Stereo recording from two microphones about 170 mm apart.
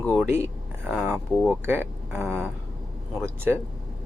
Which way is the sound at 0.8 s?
10° right (ahead or behind).